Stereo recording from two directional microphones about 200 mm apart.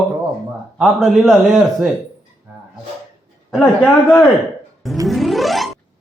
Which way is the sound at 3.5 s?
5° left (ahead or behind).